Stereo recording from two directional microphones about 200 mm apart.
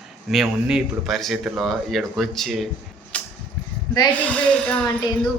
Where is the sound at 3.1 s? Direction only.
5° left (ahead or behind).